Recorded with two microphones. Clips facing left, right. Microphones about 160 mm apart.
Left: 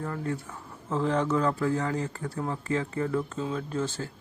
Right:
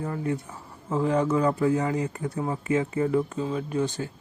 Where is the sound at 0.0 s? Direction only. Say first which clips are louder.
Right 3 dB; 15° right (ahead or behind).